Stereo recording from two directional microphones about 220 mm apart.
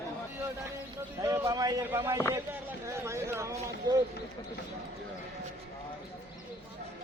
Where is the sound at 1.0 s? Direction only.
15° right (ahead or behind).